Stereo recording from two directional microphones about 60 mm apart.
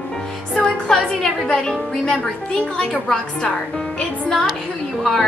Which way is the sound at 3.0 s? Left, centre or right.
Centre.